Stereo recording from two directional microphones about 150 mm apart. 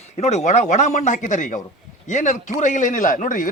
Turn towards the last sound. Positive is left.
turn(degrees=60)  # may be behind; listen again after turning